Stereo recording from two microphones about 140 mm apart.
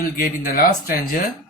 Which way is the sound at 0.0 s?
90° left.